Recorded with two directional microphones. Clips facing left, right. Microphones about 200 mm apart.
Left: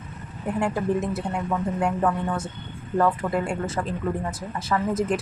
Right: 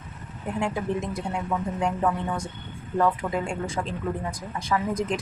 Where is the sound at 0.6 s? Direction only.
5° left (ahead or behind).